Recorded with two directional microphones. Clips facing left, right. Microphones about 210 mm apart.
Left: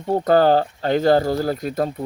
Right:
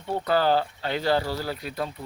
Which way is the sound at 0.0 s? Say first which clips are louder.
Left 8 dB; 40° left (ahead or behind).